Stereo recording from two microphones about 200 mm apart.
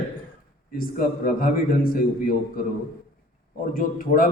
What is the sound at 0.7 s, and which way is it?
A man's voice, 45° left (ahead or behind).